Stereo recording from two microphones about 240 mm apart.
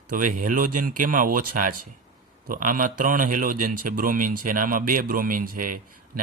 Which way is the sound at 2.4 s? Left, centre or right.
Right.